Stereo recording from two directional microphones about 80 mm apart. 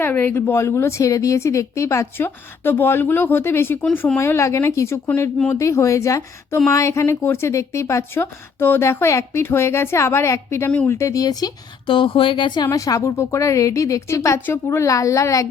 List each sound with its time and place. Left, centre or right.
0.0 s speech: left
8.2 s speech: left
11.9 s speech: left
12.7 s speech: left